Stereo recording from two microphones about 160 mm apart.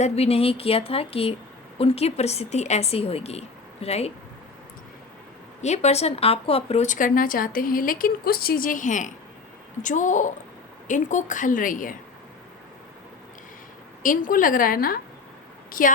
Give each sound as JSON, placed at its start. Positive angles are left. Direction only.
{"t": 0.0, "sound": "speech", "side_deg": 40}
{"t": 5.6, "sound": "a woman's voice", "side_deg": 45}
{"t": 14.0, "sound": "speech", "side_deg": 60}